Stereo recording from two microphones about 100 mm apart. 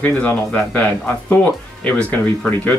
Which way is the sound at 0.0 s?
15° left (ahead or behind).